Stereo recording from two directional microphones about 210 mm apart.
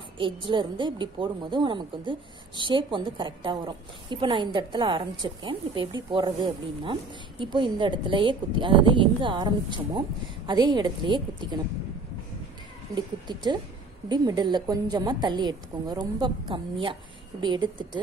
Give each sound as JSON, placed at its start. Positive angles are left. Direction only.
{"t": 0.2, "sound": "a woman's voice", "side_deg": -25}
{"t": 12.9, "sound": "a woman's voice", "side_deg": -20}